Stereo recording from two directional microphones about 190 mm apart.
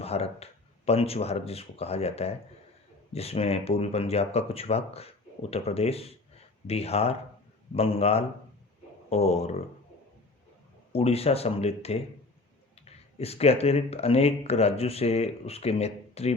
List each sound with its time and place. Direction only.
0.0 s speech: 35° left (ahead or behind)
10.9 s speech: 30° left (ahead or behind)